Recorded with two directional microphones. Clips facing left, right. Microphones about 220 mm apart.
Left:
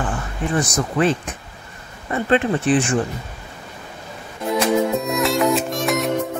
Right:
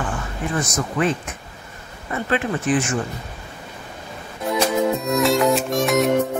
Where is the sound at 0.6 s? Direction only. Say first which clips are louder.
Left 3 dB; 30° left (ahead or behind).